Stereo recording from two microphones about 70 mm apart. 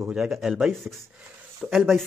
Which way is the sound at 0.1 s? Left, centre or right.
Centre.